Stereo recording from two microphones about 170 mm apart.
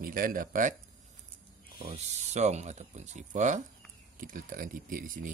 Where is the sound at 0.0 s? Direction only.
55° right (ahead or behind).